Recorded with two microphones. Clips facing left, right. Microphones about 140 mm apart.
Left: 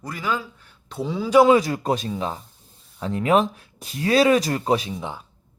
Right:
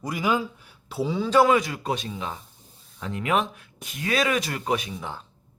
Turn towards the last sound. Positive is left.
turn(degrees=15)  # may be behind; listen again after turning